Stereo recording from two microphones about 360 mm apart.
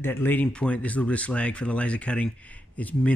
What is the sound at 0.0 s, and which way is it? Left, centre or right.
Speech, centre.